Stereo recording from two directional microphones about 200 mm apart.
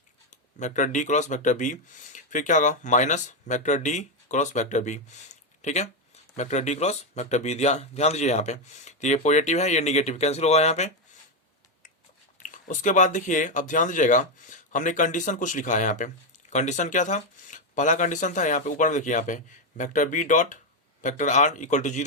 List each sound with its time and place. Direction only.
0.3 s speech: 35° left (ahead or behind)
12.4 s speech: 40° left (ahead or behind)